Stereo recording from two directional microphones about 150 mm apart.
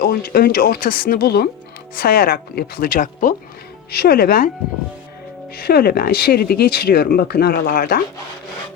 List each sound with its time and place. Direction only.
0.0 s speech: 80° left
3.9 s speech: 90° left
5.5 s speech: 90° left